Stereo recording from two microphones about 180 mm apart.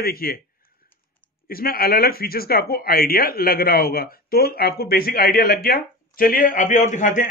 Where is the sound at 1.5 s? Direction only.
55° left (ahead or behind).